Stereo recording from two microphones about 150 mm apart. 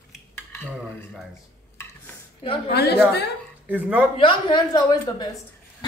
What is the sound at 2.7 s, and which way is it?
Speech, 90° left.